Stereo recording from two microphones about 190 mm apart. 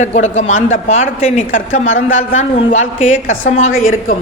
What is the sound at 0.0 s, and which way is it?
A woman's voice, 35° left (ahead or behind).